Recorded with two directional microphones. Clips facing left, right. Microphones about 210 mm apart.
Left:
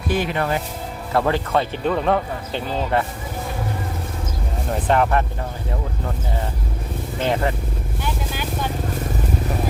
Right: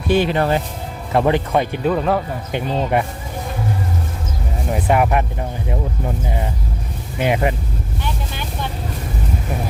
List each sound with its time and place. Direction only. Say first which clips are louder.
0.1 s speech: right 5 dB; 30° right (ahead or behind)
1.1 s speech: right 3 dB; 20° right (ahead or behind)
1.8 s speech: right 2 dB; 5° right (ahead or behind)
2.9 s speech: right 1 dB; 15° right (ahead or behind)
4.7 s speech: right 2 dB; 10° right (ahead or behind)
7.2 s speech: right 3 dB; 15° right (ahead or behind)